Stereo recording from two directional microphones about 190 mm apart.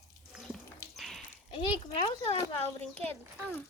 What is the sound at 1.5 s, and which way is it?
Speech, 30° left (ahead or behind).